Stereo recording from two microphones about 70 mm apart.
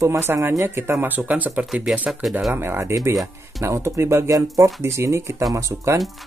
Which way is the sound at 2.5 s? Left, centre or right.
Right.